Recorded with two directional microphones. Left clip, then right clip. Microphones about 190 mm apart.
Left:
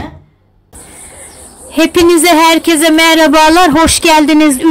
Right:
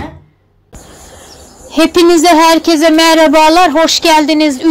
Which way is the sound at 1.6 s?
5° left (ahead or behind).